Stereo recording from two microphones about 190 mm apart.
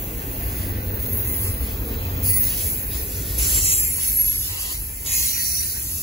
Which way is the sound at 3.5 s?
30° left (ahead or behind).